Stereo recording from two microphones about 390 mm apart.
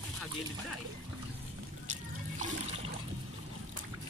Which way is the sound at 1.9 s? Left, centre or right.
Centre.